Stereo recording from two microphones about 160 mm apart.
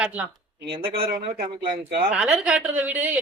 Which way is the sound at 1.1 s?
65° right (ahead or behind).